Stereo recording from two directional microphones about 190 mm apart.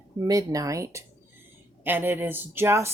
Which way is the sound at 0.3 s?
20° right (ahead or behind).